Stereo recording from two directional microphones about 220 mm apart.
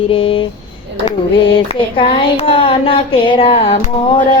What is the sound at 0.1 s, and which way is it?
Speech, 25° left (ahead or behind).